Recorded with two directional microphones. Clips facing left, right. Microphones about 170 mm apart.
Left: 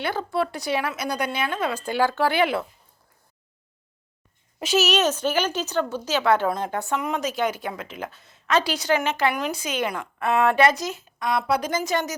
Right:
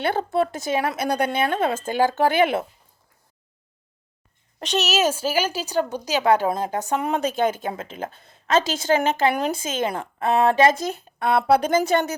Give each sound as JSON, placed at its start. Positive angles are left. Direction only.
{"t": 0.0, "sound": "speech", "side_deg": -55}
{"t": 1.0, "sound": "speech", "side_deg": -55}
{"t": 2.1, "sound": "speech", "side_deg": -20}
{"t": 4.6, "sound": "a woman's voice", "side_deg": 5}
{"t": 6.7, "sound": "speech", "side_deg": -40}
{"t": 8.1, "sound": "a woman's voice", "side_deg": -50}
{"t": 9.5, "sound": "speech", "side_deg": -50}
{"t": 9.7, "sound": "speech", "side_deg": -30}
{"t": 10.8, "sound": "speech", "side_deg": -55}
{"t": 11.4, "sound": "speech", "side_deg": -35}
{"t": 11.7, "sound": "speech", "side_deg": -55}